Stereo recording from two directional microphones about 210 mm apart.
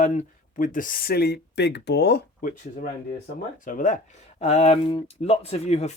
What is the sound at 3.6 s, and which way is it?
Speech, 35° left (ahead or behind).